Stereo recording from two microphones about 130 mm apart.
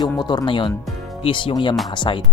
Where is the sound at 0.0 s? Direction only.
35° left (ahead or behind).